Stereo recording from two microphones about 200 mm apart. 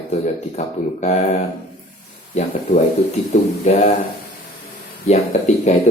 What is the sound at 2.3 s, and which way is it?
Speech, 35° left (ahead or behind).